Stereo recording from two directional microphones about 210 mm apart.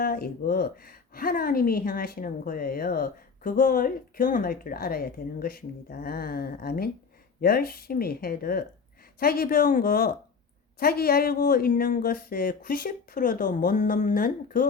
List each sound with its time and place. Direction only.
0.0 s a woman's voice: 45° left (ahead or behind)